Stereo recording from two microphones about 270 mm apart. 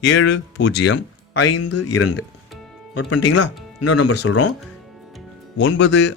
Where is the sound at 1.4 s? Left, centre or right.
Left.